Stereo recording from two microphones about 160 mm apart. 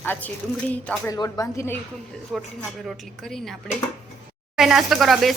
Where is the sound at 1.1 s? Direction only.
20° left (ahead or behind).